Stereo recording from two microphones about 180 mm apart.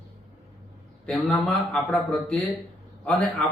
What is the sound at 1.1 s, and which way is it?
A man's voice, centre (ahead or behind).